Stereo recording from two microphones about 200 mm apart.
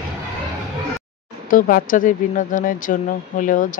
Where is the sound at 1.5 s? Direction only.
45° left (ahead or behind).